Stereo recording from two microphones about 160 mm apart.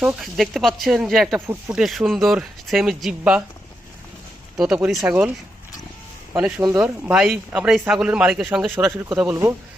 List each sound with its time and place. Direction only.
0.0 s speech: 5° right (ahead or behind)
4.6 s speech: 5° right (ahead or behind)
6.6 s speech: 20° right (ahead or behind)
6.8 s speech: 5° right (ahead or behind)